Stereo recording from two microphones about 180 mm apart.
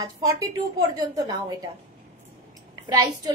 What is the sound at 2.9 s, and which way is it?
Speech, 20° right (ahead or behind).